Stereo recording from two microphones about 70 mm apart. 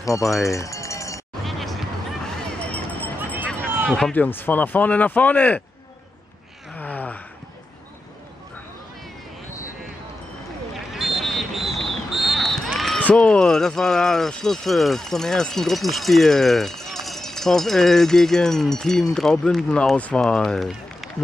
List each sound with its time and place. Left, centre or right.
0.0 s speech: left
0.5 s run: left
1.4 s music: centre
2.6 s a sound: left
3.6 s run: right
4.1 s speech: left
6.7 s gasp: left
10.9 s a sound: centre
13.0 s speech: centre